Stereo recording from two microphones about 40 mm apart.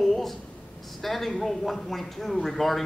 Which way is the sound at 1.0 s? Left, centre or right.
Centre.